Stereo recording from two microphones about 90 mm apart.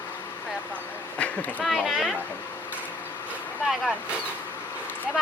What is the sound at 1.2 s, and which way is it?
Speech, 20° left (ahead or behind).